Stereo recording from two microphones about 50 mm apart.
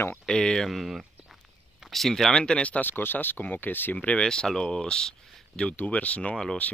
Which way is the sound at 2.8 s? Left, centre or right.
Left.